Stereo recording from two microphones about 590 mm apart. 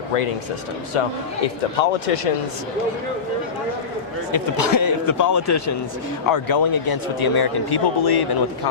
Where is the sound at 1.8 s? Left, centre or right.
Left.